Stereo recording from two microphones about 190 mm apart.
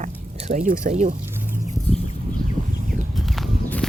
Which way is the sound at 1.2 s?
10° right (ahead or behind).